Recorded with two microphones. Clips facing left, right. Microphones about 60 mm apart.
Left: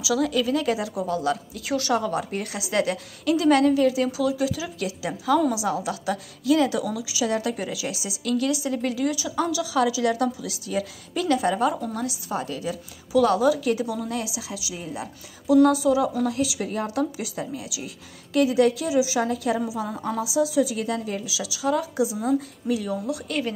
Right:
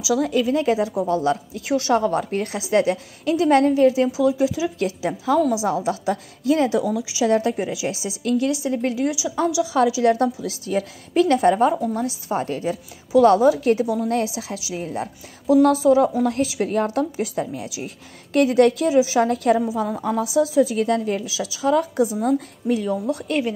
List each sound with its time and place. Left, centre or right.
0.0 s a woman's voice: right
2.0 s a woman's voice: right
11.9 s a woman's voice: right